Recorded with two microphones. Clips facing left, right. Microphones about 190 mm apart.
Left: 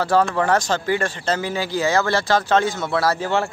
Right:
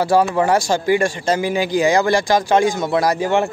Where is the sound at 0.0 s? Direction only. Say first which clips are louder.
Right 3 dB; 10° right (ahead or behind).